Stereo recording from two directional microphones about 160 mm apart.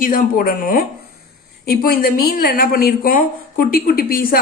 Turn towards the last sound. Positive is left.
turn(degrees=65)  # may be behind; listen again after turning